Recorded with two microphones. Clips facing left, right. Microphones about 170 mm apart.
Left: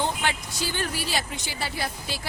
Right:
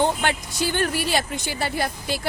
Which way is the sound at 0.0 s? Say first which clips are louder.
Right 5 dB; 55° right (ahead or behind).